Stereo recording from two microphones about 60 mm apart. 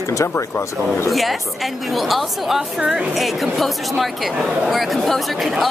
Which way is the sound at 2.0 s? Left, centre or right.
Centre.